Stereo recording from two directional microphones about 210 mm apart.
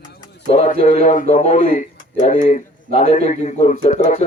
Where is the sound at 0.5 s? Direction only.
30° left (ahead or behind).